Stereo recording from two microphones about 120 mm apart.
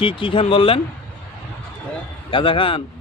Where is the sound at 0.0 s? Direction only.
45° left (ahead or behind).